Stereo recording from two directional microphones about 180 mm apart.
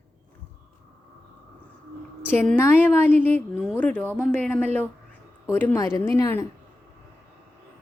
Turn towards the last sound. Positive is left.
turn(degrees=15)  # may be behind; listen again after turning